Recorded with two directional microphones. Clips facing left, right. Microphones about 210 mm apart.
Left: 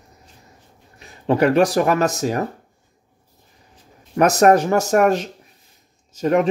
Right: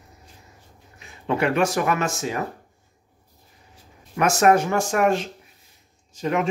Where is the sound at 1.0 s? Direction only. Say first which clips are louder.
Left 6 dB; 35° left (ahead or behind).